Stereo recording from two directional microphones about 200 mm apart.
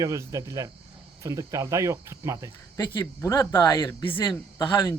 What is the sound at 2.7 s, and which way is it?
A man's voice, 10° left (ahead or behind).